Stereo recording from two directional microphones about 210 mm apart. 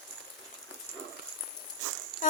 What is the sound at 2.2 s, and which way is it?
Dog, 40° left (ahead or behind).